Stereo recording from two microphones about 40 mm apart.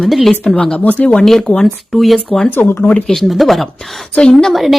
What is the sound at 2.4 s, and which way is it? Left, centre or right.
Speech, left.